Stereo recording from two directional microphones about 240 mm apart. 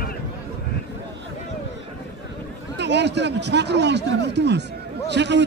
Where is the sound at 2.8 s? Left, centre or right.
Right.